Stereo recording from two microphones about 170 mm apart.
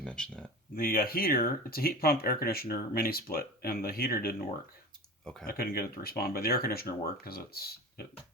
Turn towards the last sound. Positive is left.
turn(degrees=65)  # may be behind; listen again after turning